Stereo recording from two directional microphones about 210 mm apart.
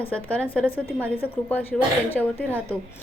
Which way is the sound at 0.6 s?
10° right (ahead or behind).